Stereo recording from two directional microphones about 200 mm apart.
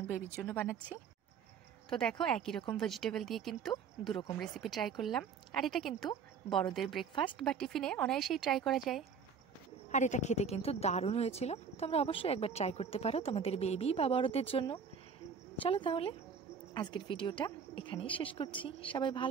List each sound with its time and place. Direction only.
0.4 s speech: 10° left (ahead or behind)
2.0 s a woman's voice: 5° left (ahead or behind)
9.8 s a woman's voice: 35° left (ahead or behind)